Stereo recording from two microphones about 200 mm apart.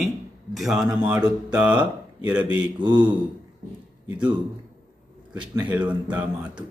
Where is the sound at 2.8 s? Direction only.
25° right (ahead or behind).